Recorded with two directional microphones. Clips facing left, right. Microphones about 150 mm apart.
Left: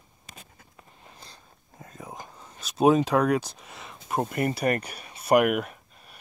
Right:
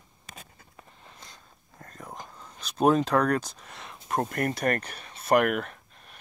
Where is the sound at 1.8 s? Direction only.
5° left (ahead or behind).